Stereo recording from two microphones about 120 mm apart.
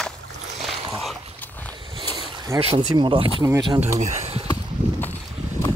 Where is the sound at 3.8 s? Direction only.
65° right (ahead or behind).